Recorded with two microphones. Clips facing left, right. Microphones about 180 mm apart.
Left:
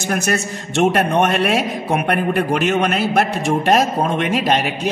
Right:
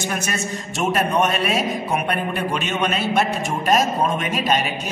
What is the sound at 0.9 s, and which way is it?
A man's voice, 70° left (ahead or behind).